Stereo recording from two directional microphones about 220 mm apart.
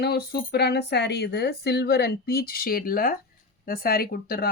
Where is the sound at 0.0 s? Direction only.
45° left (ahead or behind).